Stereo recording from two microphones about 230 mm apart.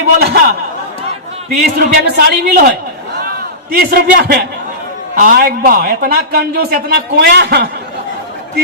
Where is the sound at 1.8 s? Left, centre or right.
Right.